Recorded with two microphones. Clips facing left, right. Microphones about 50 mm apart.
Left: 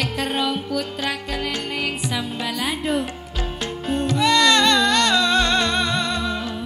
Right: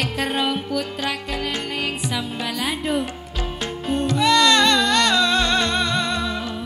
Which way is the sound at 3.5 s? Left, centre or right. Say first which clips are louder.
Even; centre.